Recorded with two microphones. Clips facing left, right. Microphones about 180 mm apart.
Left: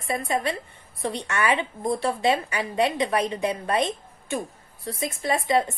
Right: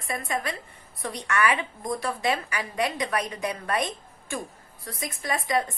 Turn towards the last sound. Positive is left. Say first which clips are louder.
# left 4 dB
turn(degrees=25)  # may be behind; listen again after turning